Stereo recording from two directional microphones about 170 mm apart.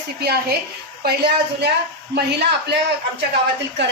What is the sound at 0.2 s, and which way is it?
A woman's voice, 70° right (ahead or behind).